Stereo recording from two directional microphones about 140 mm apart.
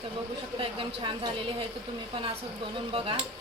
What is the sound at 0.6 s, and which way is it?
A woman's voice, 35° right (ahead or behind).